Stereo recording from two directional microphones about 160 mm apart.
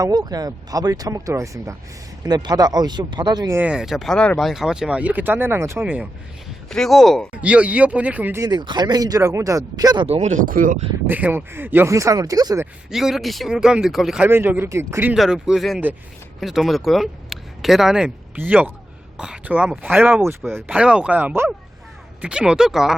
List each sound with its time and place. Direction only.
0.0 s speech: 25° right (ahead or behind)
3.6 s speech: 5° right (ahead or behind)
6.7 s speech: centre (ahead or behind)
8.4 s speech: 25° right (ahead or behind)
10.1 s speech: 45° right (ahead or behind)
11.0 s speech: 10° right (ahead or behind)
12.9 s speech: centre (ahead or behind)
14.3 s speech: 15° right (ahead or behind)
15.1 s speech: 5° right (ahead or behind)